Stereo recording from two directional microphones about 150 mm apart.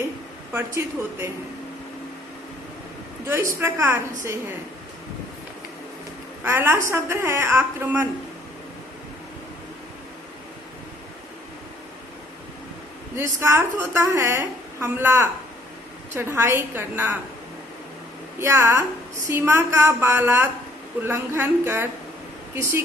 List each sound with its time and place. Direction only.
0.5 s a woman's voice: 15° right (ahead or behind)
3.2 s a woman's voice: 15° right (ahead or behind)
6.4 s a woman's voice: 15° right (ahead or behind)
13.1 s a woman's voice: 15° right (ahead or behind)
18.3 s a woman's voice: 15° right (ahead or behind)